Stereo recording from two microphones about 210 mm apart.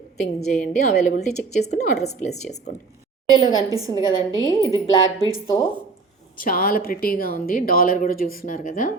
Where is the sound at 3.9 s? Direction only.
20° left (ahead or behind).